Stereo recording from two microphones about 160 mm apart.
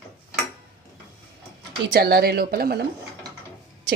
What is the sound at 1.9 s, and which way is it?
Speech, 85° right.